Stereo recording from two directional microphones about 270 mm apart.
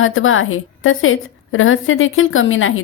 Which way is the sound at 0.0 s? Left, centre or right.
Left.